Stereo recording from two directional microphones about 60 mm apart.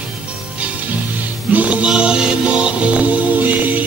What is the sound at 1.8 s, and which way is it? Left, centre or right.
Music, centre.